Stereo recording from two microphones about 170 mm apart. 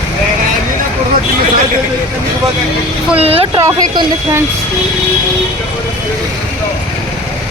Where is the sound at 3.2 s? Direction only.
35° right (ahead or behind).